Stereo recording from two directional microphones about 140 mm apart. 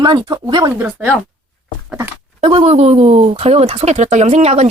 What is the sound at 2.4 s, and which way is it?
Speech, 45° right (ahead or behind).